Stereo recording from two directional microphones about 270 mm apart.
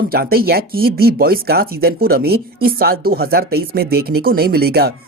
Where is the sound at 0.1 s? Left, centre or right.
Right.